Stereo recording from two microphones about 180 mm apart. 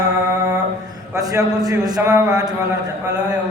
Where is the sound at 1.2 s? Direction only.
20° right (ahead or behind).